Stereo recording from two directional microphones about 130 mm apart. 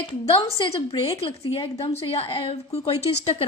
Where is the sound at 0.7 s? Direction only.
50° left (ahead or behind).